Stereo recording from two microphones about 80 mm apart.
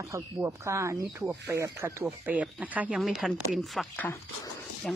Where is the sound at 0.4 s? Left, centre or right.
Right.